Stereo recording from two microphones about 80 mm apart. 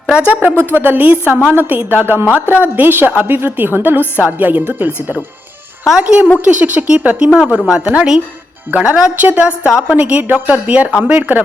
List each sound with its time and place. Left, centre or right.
0.3 s a woman's voice: centre